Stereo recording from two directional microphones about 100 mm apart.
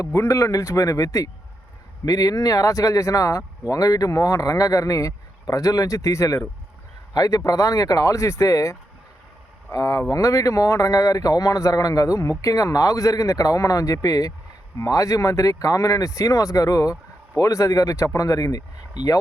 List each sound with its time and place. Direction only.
0.1 s speech: 25° left (ahead or behind)